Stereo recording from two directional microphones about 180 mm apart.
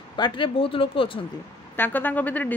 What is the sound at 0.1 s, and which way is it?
Speech, 25° left (ahead or behind).